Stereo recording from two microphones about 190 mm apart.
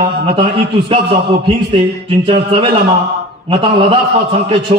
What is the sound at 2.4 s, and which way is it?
A man's voice, 30° right (ahead or behind).